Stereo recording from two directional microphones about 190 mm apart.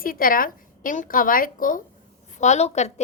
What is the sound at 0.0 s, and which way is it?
A woman's voice, 50° left (ahead or behind).